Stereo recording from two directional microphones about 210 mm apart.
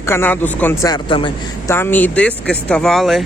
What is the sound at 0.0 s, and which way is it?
Speech, 10° left (ahead or behind).